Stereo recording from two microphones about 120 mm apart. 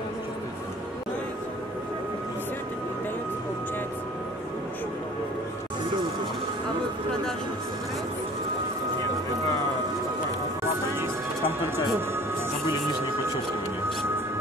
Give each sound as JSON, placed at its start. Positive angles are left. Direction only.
{"t": 11.0, "sound": "music", "side_deg": -20}